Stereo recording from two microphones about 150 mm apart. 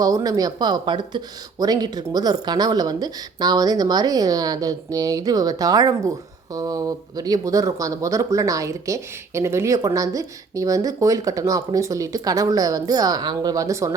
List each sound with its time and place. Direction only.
0.0 s speech: 25° right (ahead or behind)